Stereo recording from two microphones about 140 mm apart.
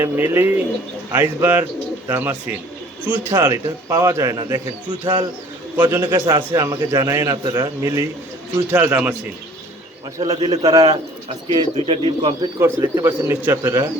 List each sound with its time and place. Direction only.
0.0 s a man's voice: 15° right (ahead or behind); by 5.2 s 35° right (ahead or behind)
5.7 s speech: 15° right (ahead or behind)
6.1 s a man's voice: 30° right (ahead or behind)
7.8 s a man's voice: 20° right (ahead or behind)
10.2 s a man's voice: 30° right (ahead or behind)
12.5 s speech: 20° right (ahead or behind)